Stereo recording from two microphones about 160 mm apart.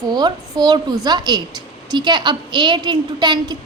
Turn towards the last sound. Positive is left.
turn(degrees=-25)  # may be behind; listen again after turning